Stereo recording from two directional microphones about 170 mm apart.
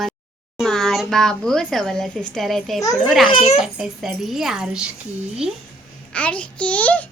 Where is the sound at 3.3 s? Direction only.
40° left (ahead or behind).